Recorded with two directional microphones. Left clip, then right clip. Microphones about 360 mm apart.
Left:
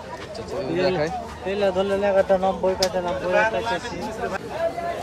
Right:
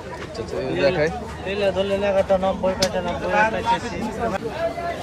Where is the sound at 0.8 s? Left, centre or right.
Centre.